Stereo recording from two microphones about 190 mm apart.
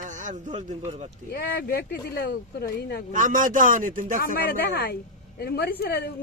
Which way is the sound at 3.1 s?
45° right (ahead or behind).